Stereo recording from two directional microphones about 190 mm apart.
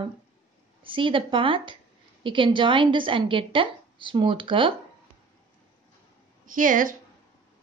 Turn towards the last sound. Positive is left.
turn(degrees=-45)  # may be behind; listen again after turning